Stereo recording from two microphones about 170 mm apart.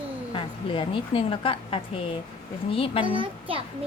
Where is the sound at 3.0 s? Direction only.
30° right (ahead or behind).